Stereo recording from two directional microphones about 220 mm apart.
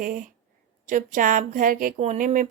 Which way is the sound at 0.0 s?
40° right (ahead or behind).